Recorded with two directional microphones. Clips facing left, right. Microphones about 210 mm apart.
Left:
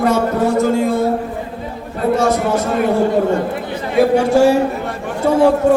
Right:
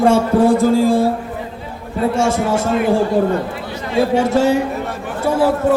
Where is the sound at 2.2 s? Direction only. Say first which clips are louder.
Even; 25° right (ahead or behind).